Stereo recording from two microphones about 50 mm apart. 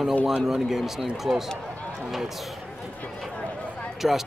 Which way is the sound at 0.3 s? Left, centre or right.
Centre.